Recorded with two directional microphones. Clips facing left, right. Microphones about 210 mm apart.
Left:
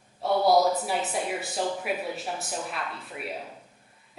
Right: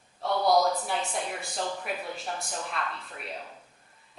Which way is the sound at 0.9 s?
5° left (ahead or behind).